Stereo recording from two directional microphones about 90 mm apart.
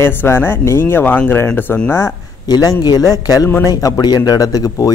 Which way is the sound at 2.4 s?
45° left (ahead or behind).